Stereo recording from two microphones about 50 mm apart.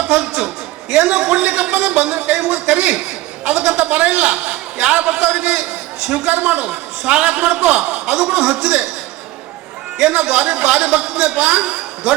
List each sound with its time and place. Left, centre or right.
0.1 s a man's voice: centre
10.0 s a man's voice: centre